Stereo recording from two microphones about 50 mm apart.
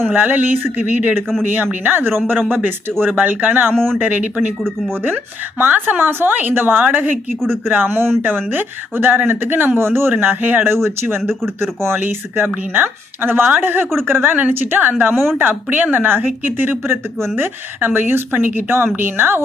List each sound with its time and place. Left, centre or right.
0.1 s a woman's voice: right
5.5 s a woman's voice: right